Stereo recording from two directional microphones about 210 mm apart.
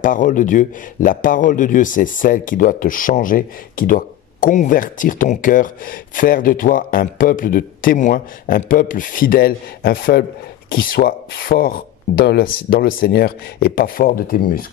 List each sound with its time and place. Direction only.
0.0 s speech: 40° left (ahead or behind)